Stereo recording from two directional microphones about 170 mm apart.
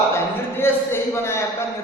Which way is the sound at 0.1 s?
15° left (ahead or behind).